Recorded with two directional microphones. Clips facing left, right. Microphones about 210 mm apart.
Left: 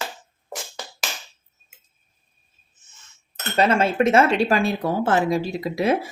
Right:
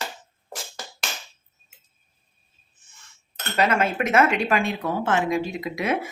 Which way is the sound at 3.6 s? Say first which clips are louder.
Left 3 dB; 30° left (ahead or behind).